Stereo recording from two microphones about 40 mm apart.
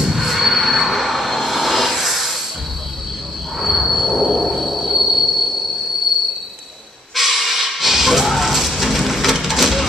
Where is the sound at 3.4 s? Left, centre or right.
Centre.